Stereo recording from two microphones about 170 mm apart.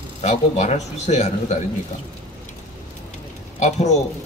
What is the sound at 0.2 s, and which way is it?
A man's voice, 40° left (ahead or behind).